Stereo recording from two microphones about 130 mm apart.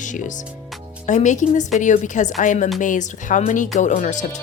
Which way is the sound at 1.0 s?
65° left (ahead or behind).